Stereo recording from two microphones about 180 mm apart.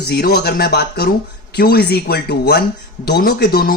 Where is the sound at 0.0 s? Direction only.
60° left (ahead or behind).